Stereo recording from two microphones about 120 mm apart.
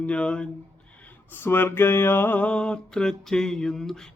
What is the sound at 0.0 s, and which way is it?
Speech, 10° left (ahead or behind).